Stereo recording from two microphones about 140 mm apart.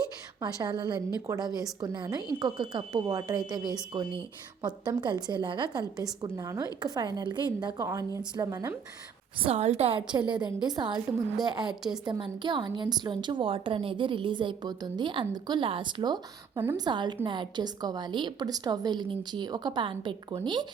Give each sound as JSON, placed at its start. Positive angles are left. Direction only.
{"t": 0.4, "sound": "a woman's voice", "side_deg": -30}
{"t": 6.0, "sound": "a woman's voice", "side_deg": -25}
{"t": 9.4, "sound": "a woman's voice", "side_deg": -50}
{"t": 10.1, "sound": "a woman's voice", "side_deg": -35}